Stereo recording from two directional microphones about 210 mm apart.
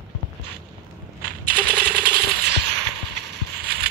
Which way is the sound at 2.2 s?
50° right (ahead or behind).